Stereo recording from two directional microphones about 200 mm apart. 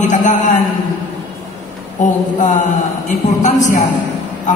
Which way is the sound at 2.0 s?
40° left (ahead or behind).